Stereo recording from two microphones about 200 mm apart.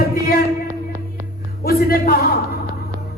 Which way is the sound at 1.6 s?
50° left (ahead or behind).